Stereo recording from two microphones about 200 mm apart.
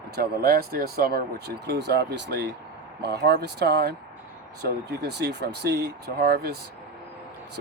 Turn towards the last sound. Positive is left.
turn(degrees=-50)  # may be behind; listen again after turning